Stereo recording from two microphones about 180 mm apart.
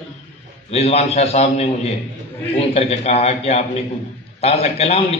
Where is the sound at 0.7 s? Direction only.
35° left (ahead or behind).